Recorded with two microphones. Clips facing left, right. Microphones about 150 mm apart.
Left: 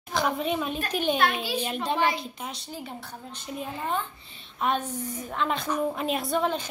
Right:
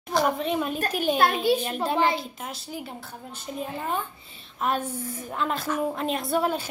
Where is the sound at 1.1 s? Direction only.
40° right (ahead or behind).